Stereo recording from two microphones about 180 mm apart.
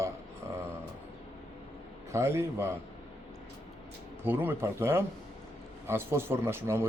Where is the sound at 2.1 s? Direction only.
15° right (ahead or behind).